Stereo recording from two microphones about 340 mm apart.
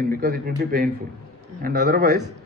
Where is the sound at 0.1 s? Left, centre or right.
Right.